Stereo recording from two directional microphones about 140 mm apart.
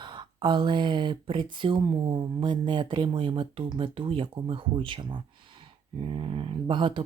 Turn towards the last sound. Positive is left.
turn(degrees=-35)  # may be behind; listen again after turning